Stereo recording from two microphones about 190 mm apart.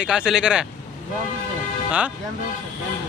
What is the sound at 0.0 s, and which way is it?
Speech, 5° right (ahead or behind).